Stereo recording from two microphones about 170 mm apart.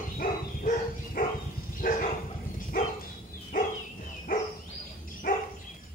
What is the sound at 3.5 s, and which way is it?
Dog, 50° left (ahead or behind).